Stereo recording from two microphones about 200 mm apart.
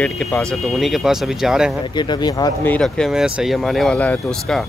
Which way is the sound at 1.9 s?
20° left (ahead or behind).